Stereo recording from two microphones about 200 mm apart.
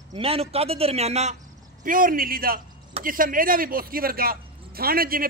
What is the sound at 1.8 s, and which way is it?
A man's voice, 45° right (ahead or behind).